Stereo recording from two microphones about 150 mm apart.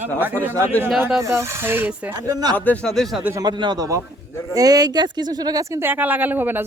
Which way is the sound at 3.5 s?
30° right (ahead or behind).